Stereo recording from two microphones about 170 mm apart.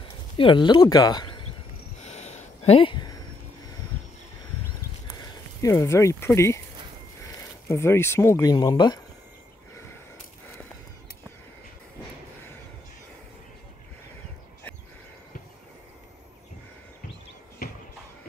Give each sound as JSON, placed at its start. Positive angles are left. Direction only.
{"t": 0.4, "sound": "speech", "side_deg": 30}
{"t": 2.0, "sound": "a sound", "side_deg": 40}
{"t": 5.6, "sound": "speech", "side_deg": 20}